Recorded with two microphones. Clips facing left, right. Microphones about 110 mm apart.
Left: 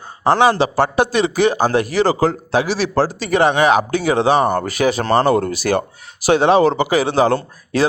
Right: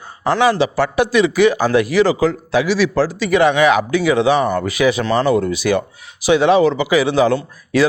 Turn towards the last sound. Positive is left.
turn(degrees=35)  # may be behind; listen again after turning